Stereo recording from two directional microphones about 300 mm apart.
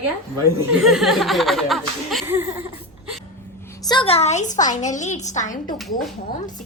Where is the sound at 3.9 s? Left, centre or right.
Centre.